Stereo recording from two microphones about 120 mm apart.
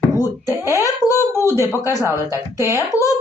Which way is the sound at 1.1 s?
25° left (ahead or behind).